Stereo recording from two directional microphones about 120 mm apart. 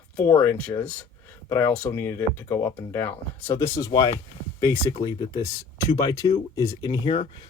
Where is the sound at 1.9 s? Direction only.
20° left (ahead or behind).